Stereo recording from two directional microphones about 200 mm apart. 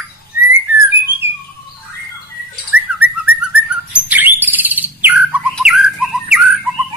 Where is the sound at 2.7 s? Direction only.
5° right (ahead or behind).